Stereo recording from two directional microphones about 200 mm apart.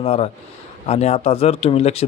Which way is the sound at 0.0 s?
30° left (ahead or behind).